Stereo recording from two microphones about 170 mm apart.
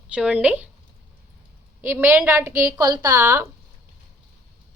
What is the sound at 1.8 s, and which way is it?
A woman's voice, 10° right (ahead or behind).